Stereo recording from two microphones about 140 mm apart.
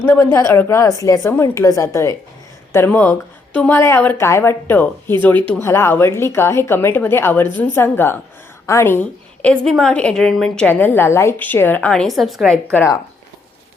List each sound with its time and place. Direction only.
0.0 s a woman's voice: 15° left (ahead or behind); by 12.5 s centre (ahead or behind)
12.7 s a woman's voice: 20° left (ahead or behind)